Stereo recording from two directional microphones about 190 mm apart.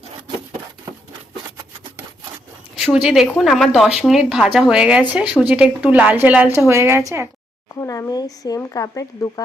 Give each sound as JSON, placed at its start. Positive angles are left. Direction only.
{"t": 2.7, "sound": "a woman's voice", "side_deg": -5}
{"t": 7.7, "sound": "speech", "side_deg": 15}